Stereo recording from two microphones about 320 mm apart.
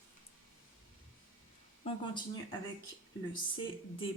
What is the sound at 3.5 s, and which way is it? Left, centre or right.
Speech, centre.